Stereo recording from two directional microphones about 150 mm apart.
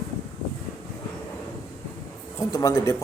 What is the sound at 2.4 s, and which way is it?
Speech, 20° left (ahead or behind).